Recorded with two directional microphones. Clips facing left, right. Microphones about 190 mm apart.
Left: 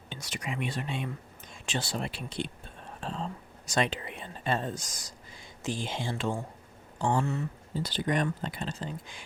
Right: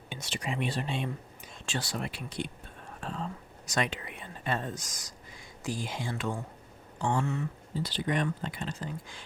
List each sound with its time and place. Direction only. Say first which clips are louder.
0.2 s speech: right 2 dB; 30° right (ahead or behind)
1.6 s speech: left 1 dB; 25° left (ahead or behind)